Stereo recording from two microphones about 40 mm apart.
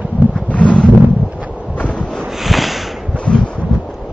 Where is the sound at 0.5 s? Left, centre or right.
Left.